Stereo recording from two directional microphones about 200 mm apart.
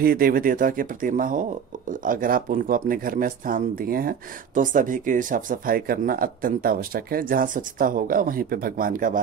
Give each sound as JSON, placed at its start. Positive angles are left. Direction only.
{"t": 0.0, "sound": "speech", "side_deg": -50}